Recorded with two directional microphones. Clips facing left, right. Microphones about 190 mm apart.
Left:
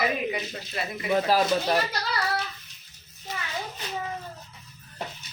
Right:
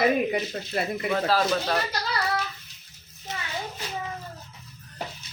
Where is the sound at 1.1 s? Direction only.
15° left (ahead or behind).